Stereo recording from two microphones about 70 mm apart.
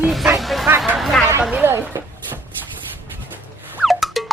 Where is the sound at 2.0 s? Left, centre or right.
Right.